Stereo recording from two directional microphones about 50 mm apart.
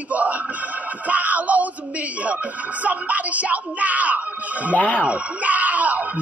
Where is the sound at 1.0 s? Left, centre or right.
Right.